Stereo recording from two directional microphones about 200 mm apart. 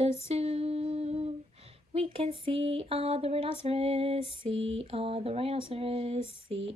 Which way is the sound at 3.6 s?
30° right (ahead or behind).